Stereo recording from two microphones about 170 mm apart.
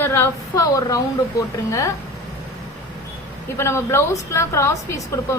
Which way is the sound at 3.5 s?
15° left (ahead or behind).